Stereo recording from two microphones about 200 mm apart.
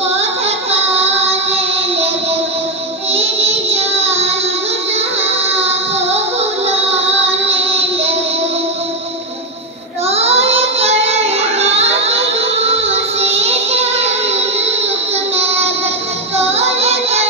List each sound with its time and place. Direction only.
0.2 s child singing: 30° right (ahead or behind)
3.1 s child singing: 30° right (ahead or behind)
5.5 s music: 30° right (ahead or behind)
10.0 s child singing: 30° right (ahead or behind)
16.3 s music: 30° right (ahead or behind)